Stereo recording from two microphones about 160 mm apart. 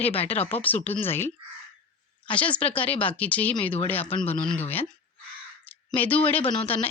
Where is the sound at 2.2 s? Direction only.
10° left (ahead or behind).